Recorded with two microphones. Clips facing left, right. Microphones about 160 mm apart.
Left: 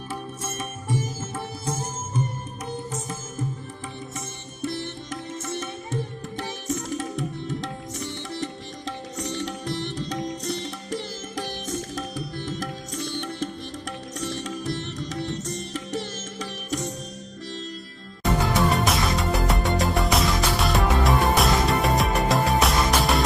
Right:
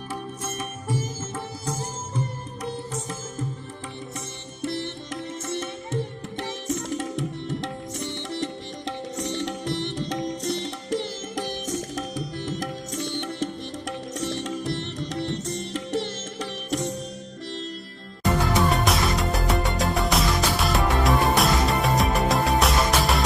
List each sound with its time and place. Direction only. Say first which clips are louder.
0.1 s music: right 1 dB; 10° right (ahead or behind)
7.0 s tabla: right 1 dB; 20° right (ahead or behind)
8.1 s sitar: right 3 dB; 25° right (ahead or behind)
18.2 s music: even; centre (ahead or behind)